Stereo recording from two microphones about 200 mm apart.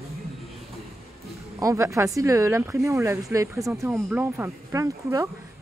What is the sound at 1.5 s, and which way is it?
Speech, 15° right (ahead or behind).